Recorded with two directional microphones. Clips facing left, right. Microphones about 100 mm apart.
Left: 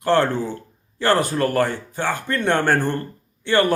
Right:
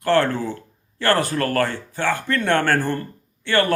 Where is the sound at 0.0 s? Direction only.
20° left (ahead or behind).